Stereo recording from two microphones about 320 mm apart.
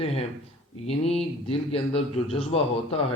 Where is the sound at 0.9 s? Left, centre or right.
Centre.